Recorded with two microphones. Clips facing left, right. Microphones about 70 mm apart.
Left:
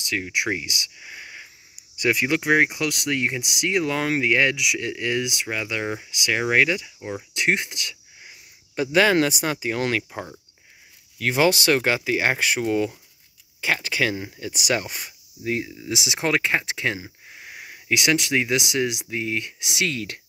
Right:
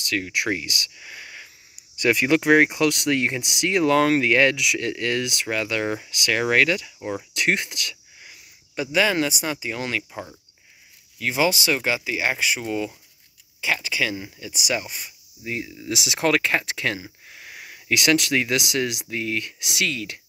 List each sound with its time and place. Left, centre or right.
0.0 s speech: centre
7.3 s a sound: centre
8.7 s speech: left
15.7 s speech: left
19.9 s speech: left